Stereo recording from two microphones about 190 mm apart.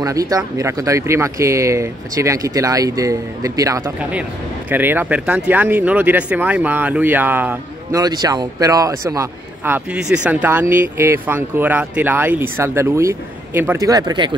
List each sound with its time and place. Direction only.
0.0 s speech: 20° right (ahead or behind)
8.0 s speech: 20° right (ahead or behind)
9.9 s speech: 5° right (ahead or behind); by 14.3 s 20° right (ahead or behind)